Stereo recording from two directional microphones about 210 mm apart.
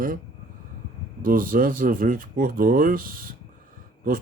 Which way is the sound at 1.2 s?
40° right (ahead or behind).